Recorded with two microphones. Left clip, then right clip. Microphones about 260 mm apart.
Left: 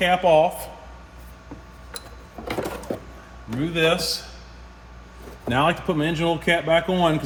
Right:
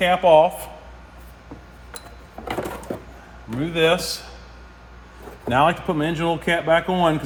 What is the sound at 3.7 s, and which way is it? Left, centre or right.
Speech, right.